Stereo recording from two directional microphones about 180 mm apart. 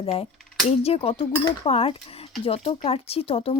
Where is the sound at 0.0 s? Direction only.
30° left (ahead or behind).